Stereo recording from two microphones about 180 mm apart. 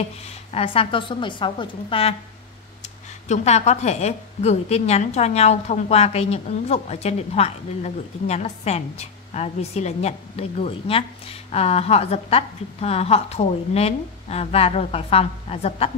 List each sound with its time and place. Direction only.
0.5 s a woman's voice: 30° left (ahead or behind)
3.3 s a woman's voice: 40° left (ahead or behind)